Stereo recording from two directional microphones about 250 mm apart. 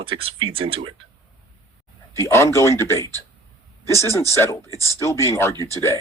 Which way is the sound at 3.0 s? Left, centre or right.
Centre.